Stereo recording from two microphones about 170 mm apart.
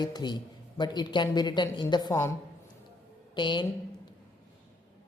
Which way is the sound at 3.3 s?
30° left (ahead or behind).